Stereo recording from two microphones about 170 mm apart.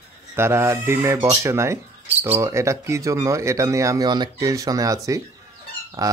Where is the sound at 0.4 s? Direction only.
15° right (ahead or behind).